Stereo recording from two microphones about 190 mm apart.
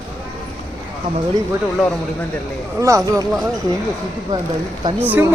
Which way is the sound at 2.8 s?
15° right (ahead or behind).